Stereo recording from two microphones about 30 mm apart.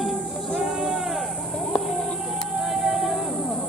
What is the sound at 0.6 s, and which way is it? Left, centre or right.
Sheep, centre.